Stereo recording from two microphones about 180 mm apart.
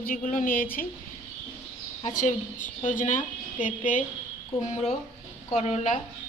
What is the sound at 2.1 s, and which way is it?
A woman's voice, 45° left (ahead or behind).